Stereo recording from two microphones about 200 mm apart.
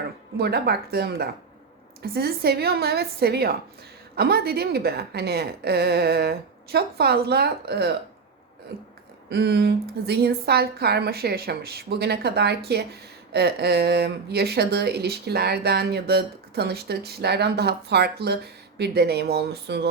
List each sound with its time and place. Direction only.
0.3 s a woman's voice: 50° right (ahead or behind)
9.3 s a woman's voice: 55° right (ahead or behind)